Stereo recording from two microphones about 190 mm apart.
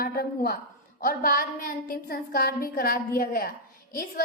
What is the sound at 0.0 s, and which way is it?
A woman's voice, 50° left (ahead or behind).